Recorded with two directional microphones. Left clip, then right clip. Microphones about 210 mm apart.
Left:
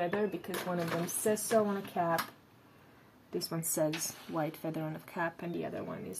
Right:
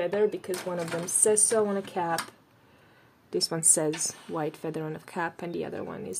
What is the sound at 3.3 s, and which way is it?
Speech, 55° right (ahead or behind).